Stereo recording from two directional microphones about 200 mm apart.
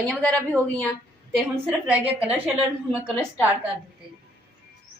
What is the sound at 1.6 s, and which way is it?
A woman's voice, 10° right (ahead or behind).